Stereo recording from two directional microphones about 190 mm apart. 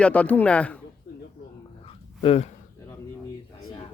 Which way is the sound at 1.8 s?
30° left (ahead or behind).